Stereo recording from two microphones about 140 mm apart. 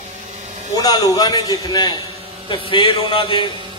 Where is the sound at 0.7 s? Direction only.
30° left (ahead or behind).